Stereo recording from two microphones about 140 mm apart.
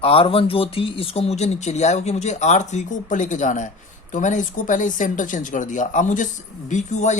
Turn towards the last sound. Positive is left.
turn(degrees=55)  # may be behind; listen again after turning